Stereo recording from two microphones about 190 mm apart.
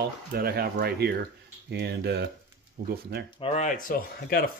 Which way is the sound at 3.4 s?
35° left (ahead or behind).